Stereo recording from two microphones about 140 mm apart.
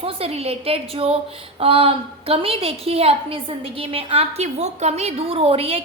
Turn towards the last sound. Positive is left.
turn(degrees=-45)  # may be behind; listen again after turning